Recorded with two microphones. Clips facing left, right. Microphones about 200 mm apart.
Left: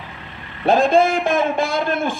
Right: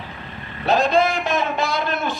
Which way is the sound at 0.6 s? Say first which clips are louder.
Left 3 dB; 50° left (ahead or behind).